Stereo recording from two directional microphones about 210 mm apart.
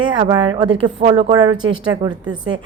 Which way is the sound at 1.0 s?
30° right (ahead or behind).